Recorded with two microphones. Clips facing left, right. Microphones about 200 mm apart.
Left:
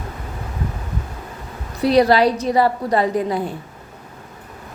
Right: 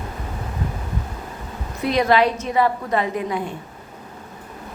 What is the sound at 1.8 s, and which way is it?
A woman's voice, 35° left (ahead or behind).